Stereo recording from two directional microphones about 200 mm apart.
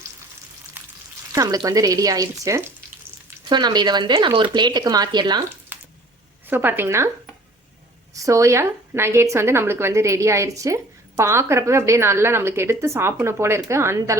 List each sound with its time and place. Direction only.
1.3 s a woman's voice: 15° right (ahead or behind)
6.5 s a woman's voice: 10° right (ahead or behind)
8.1 s a woman's voice: 15° right (ahead or behind)